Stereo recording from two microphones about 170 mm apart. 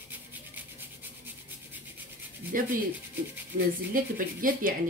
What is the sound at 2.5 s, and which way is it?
Speech, 55° right (ahead or behind).